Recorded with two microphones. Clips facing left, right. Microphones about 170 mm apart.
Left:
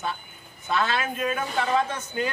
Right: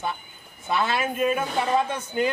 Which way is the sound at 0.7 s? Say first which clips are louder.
Right 1 dB; 10° right (ahead or behind).